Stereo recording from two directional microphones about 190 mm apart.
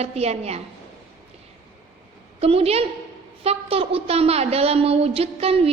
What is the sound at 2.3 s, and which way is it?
A woman's voice, 30° right (ahead or behind).